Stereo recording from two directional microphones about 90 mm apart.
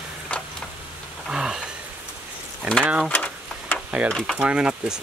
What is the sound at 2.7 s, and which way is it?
Speech, 15° right (ahead or behind).